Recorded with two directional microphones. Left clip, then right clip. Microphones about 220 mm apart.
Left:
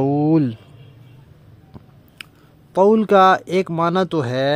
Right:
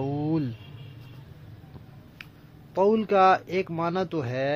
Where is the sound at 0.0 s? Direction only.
45° left (ahead or behind).